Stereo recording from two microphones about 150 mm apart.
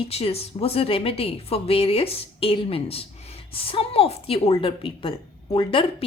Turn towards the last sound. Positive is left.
turn(degrees=35)  # may be behind; listen again after turning